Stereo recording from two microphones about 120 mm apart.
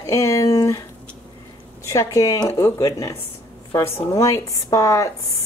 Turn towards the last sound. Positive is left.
turn(degrees=25)  # may be behind; listen again after turning